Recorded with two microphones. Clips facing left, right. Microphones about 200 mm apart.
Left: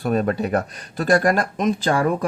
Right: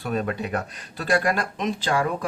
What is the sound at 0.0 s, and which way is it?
Speech, 45° left (ahead or behind).